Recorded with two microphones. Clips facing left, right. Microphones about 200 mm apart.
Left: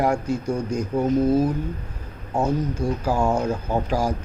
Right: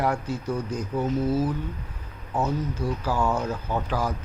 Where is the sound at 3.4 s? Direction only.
25° left (ahead or behind).